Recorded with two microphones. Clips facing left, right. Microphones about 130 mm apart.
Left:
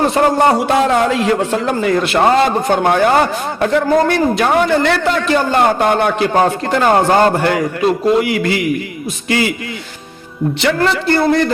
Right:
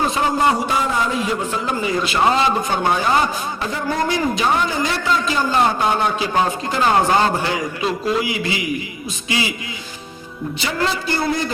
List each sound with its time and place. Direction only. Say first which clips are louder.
0.0 s a man's voice: left 6 dB; 65° left (ahead or behind)
10.8 s a man's voice: left 3 dB; 65° left (ahead or behind)